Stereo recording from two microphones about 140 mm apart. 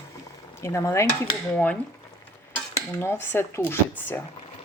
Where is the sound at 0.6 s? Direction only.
20° left (ahead or behind).